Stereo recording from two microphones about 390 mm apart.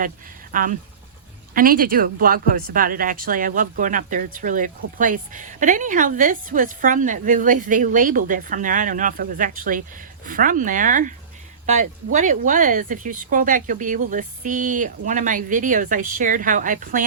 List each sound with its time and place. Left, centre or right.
0.5 s speech: right